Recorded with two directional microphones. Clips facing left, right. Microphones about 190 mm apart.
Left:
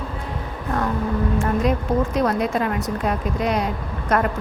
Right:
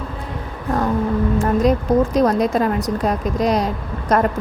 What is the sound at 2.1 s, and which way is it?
A woman's voice, 40° right (ahead or behind).